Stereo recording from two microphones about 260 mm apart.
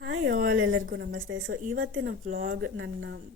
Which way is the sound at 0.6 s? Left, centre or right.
Right.